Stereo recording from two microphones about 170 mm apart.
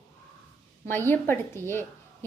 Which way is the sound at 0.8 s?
15° left (ahead or behind).